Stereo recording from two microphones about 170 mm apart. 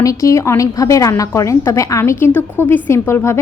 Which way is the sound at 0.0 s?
20° left (ahead or behind).